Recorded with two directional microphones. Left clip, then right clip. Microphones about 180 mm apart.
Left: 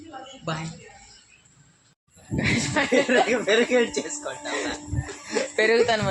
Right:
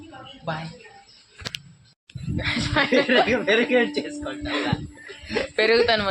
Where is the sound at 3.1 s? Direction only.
35° right (ahead or behind).